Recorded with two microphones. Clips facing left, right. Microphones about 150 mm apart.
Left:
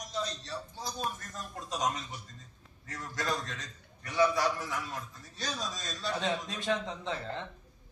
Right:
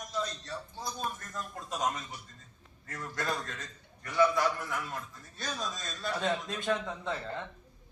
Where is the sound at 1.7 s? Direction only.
50° right (ahead or behind).